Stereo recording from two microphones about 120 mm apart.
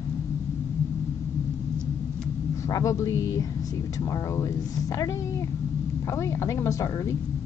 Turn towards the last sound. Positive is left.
turn(degrees=25)  # may be behind; listen again after turning